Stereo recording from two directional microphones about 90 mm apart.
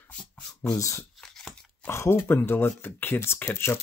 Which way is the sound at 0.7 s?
35° left (ahead or behind).